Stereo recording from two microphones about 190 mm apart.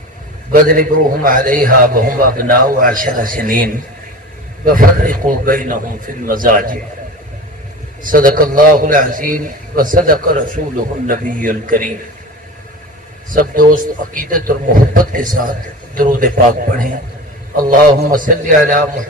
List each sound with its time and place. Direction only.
0.5 s a man's voice: 50° right (ahead or behind)
8.0 s a man's voice: 45° right (ahead or behind)
13.3 s a man's voice: 45° right (ahead or behind)